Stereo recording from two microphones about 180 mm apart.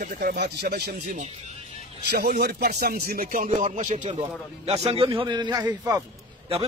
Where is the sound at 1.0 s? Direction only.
45° right (ahead or behind).